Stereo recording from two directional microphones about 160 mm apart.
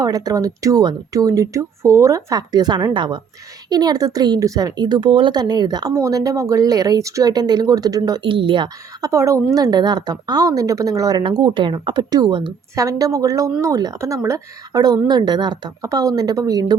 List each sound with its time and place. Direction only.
0.0 s speech: 25° right (ahead or behind)